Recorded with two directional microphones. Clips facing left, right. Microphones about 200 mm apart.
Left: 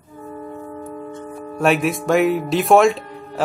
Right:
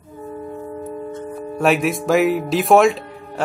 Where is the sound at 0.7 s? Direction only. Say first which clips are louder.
Right 3 dB; 20° right (ahead or behind).